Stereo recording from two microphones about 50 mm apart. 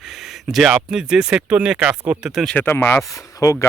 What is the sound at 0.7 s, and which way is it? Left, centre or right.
Speech, centre.